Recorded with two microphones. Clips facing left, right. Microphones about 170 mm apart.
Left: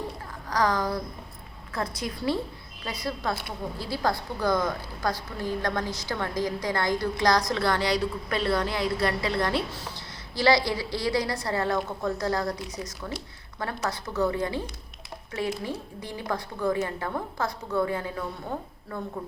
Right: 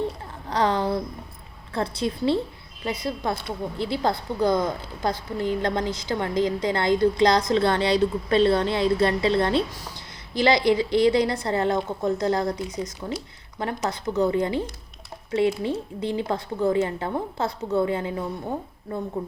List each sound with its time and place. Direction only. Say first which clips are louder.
0.5 s a woman's voice: right 3 dB; 25° right (ahead or behind)